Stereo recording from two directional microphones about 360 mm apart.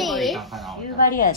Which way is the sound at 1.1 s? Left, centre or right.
Left.